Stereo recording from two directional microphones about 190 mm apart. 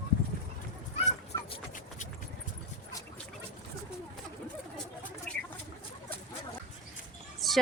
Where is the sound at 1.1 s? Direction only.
40° left (ahead or behind).